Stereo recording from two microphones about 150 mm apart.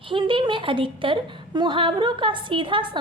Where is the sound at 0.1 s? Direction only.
35° right (ahead or behind).